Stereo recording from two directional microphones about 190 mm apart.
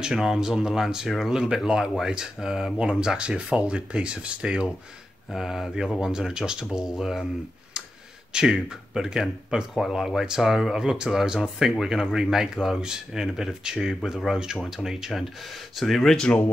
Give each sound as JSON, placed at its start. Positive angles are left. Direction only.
{"t": 0.0, "sound": "speech", "side_deg": 0}
{"t": 8.3, "sound": "speech", "side_deg": -5}